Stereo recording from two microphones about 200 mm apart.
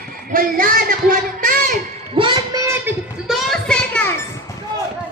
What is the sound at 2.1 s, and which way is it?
Child singing, 25° right (ahead or behind).